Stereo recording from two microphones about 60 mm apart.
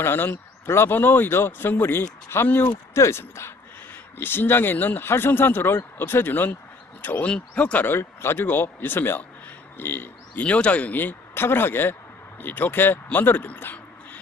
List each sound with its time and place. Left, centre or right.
0.0 s speech: left
2.4 s speech: left
2.9 s speech: left
7.2 s speech: centre
7.8 s speech: left
10.4 s speech: left